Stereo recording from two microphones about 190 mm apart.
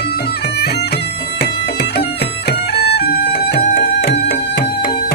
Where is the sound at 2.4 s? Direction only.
60° left (ahead or behind).